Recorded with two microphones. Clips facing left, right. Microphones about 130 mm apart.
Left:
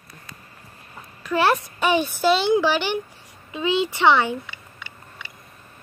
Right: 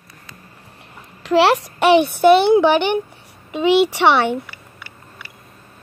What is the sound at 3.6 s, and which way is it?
Speech, 80° right.